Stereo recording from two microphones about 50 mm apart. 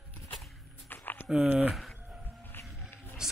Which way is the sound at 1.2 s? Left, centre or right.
Centre.